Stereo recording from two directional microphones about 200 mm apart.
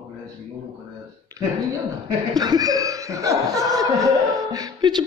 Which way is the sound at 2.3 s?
20° right (ahead or behind).